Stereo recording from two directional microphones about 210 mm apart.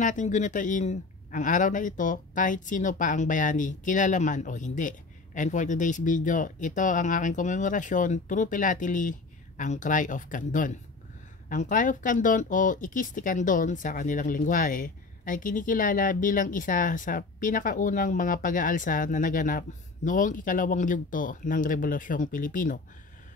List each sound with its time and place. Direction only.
0.0 s speech: 35° left (ahead or behind)